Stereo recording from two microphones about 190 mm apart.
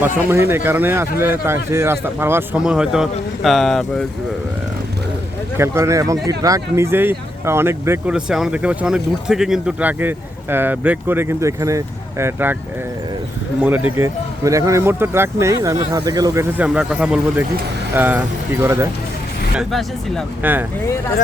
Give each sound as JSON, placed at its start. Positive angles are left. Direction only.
{"t": 0.0, "sound": "speech", "side_deg": -10}
{"t": 5.5, "sound": "speech", "side_deg": -15}
{"t": 13.6, "sound": "speech", "side_deg": -10}
{"t": 19.5, "sound": "speech", "side_deg": 0}
{"t": 20.4, "sound": "speech", "side_deg": -10}